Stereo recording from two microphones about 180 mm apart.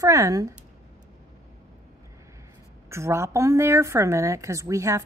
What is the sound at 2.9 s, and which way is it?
Speech, 15° right (ahead or behind).